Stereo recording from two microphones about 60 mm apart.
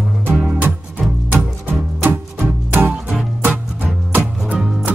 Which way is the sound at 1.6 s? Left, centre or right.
Right.